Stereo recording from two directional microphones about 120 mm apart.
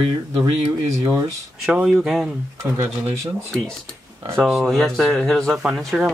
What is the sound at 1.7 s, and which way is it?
Speech, 5° right (ahead or behind).